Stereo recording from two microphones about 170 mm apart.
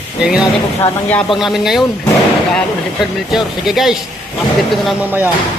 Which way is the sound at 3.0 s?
Centre (ahead or behind).